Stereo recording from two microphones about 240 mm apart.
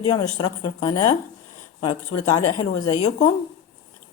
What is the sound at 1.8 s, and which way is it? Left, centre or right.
Speech, left.